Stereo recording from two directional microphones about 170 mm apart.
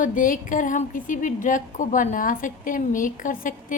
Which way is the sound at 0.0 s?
50° left (ahead or behind).